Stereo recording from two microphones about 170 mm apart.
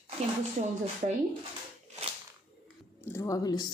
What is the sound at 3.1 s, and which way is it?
Speech, 20° left (ahead or behind).